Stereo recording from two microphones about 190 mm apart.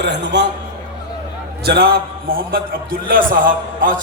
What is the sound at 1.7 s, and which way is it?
A man's voice, 55° right (ahead or behind).